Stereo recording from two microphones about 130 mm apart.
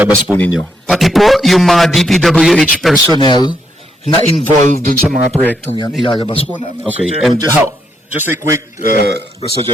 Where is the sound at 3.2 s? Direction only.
35° left (ahead or behind).